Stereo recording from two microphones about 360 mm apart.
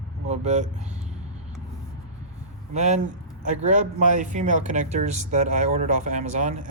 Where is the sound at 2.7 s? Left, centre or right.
Centre.